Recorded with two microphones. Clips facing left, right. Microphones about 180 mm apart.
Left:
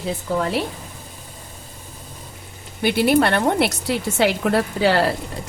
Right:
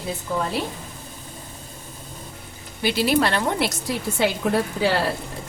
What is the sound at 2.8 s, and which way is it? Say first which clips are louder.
A woman's voice: left 4 dB; 55° left (ahead or behind).